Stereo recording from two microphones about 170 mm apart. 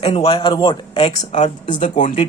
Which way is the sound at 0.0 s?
35° left (ahead or behind).